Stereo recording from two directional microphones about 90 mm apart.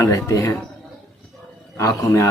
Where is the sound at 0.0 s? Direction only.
35° left (ahead or behind).